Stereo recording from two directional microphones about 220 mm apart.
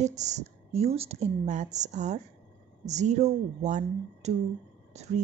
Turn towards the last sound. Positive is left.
turn(degrees=-30)  # may be behind; listen again after turning